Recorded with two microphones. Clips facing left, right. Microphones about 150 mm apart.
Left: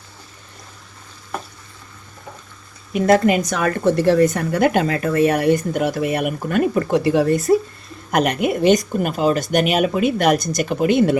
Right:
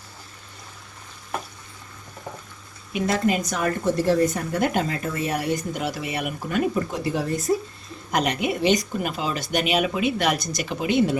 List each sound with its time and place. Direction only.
3.2 s speech: 75° left (ahead or behind)
8.1 s speech: 55° left (ahead or behind)